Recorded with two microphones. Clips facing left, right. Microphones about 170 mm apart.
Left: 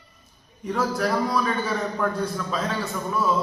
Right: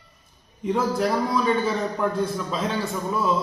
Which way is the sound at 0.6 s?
20° right (ahead or behind).